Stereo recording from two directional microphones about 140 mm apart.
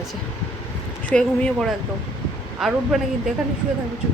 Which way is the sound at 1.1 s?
5° left (ahead or behind).